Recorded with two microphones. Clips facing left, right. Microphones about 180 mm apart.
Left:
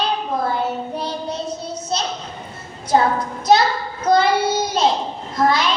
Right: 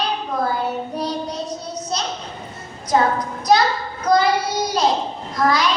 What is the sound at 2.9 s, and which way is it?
Speech, 30° left (ahead or behind).